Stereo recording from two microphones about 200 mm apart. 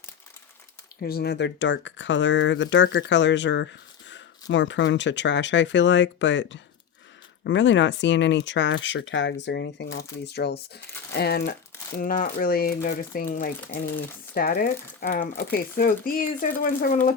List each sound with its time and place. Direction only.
1.0 s speech: 55° left (ahead or behind)